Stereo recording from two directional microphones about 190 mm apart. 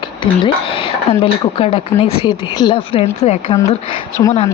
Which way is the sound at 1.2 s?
30° left (ahead or behind).